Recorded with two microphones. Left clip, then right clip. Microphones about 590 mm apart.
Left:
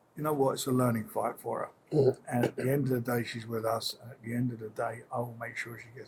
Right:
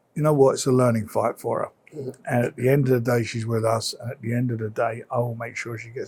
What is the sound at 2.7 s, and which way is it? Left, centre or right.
Speech, right.